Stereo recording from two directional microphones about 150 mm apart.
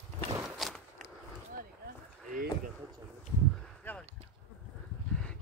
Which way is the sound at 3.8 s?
10° left (ahead or behind).